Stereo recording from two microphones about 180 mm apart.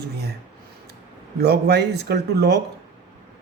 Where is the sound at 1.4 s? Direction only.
65° right (ahead or behind).